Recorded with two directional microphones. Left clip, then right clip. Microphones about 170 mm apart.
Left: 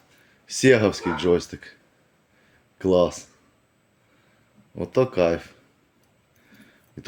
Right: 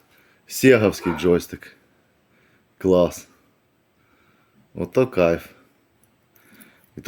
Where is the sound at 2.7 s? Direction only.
35° right (ahead or behind).